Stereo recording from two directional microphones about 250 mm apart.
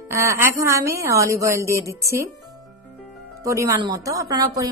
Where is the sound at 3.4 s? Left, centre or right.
Centre.